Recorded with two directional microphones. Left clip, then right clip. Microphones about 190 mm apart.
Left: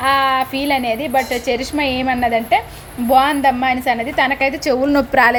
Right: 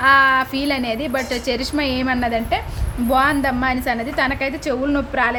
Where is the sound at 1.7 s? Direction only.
25° right (ahead or behind).